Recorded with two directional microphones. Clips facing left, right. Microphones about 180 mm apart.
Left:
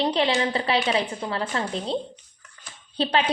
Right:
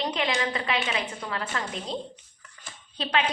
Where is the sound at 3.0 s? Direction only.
35° left (ahead or behind).